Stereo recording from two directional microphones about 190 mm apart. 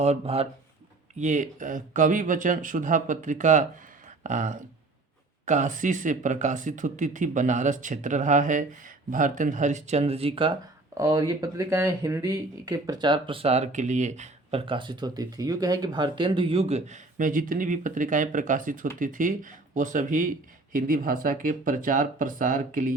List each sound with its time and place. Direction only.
0.0 s speech: 35° right (ahead or behind)
10.9 s speech: 15° right (ahead or behind); by 23.0 s 45° right (ahead or behind)